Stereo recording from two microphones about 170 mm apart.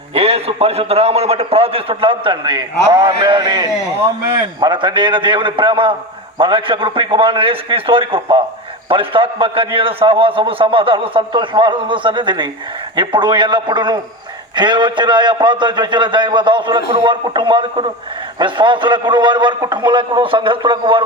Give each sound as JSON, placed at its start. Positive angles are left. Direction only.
{"t": 0.1, "sound": "a man's voice", "side_deg": -35}